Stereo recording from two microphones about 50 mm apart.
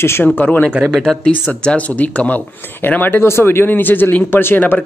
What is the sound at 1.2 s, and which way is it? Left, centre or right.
Speech, left.